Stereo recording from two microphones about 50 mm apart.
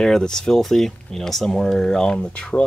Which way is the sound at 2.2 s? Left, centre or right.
Left.